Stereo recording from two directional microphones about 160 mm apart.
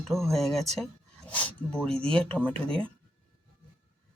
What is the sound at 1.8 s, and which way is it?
Speech, 5° left (ahead or behind).